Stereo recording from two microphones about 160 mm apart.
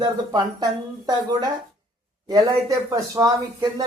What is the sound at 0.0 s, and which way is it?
Speech, 25° right (ahead or behind).